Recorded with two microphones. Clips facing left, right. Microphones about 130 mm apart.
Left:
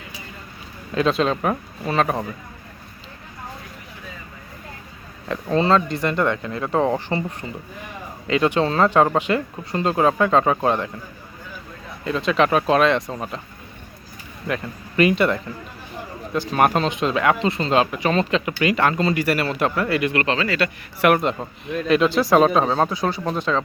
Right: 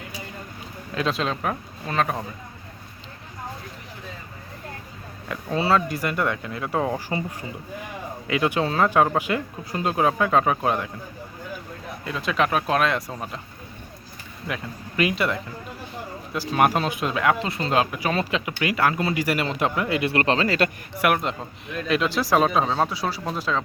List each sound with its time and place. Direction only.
0.9 s speech: centre (ahead or behind)
5.3 s speech: 5° right (ahead or behind)
6.7 s speech: 25° left (ahead or behind)
7.1 s speech: 10° right (ahead or behind)
12.0 s speech: 5° right (ahead or behind)
14.4 s speech: 5° right (ahead or behind); by 20.1 s 20° right (ahead or behind)
20.1 s speech: 35° right (ahead or behind)
21.0 s speech: centre (ahead or behind)